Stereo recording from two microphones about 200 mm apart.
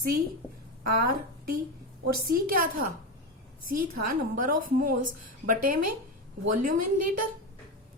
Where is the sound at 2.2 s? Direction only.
45° right (ahead or behind).